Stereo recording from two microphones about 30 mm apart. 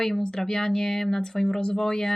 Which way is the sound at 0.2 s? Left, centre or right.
Left.